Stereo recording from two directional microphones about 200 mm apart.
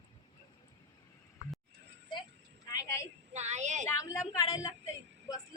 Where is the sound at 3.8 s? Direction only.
15° left (ahead or behind).